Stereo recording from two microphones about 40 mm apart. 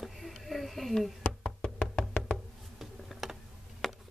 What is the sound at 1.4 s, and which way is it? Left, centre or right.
Music, left.